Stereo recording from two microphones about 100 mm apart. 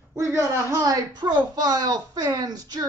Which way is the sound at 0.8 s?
40° right (ahead or behind).